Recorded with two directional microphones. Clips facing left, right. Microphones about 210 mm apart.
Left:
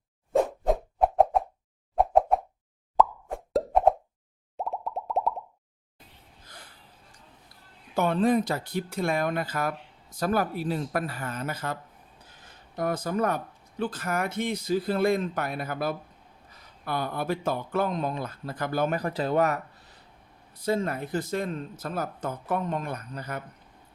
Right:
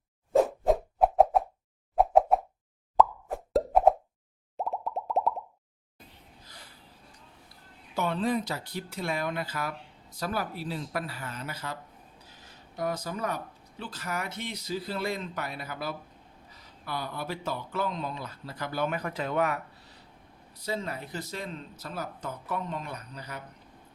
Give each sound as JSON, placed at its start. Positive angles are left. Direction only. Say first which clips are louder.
{"t": 0.3, "sound": "plop", "louder": "right 1 dB", "side_deg": 0}
{"t": 7.9, "sound": "speech", "louder": "left 5 dB", "side_deg": 50}
{"t": 20.5, "sound": "speech", "louder": "left 7 dB", "side_deg": 50}